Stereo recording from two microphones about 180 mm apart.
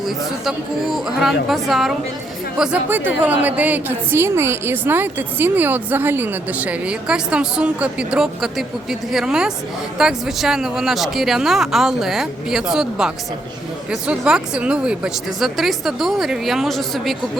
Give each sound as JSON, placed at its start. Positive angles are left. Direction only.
{"t": 0.0, "sound": "a woman's voice", "side_deg": 0}